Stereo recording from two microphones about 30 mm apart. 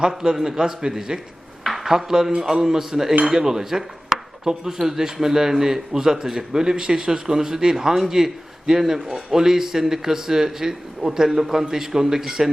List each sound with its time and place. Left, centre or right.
0.3 s a man's voice: centre